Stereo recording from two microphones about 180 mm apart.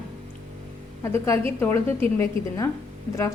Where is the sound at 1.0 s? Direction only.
15° left (ahead or behind).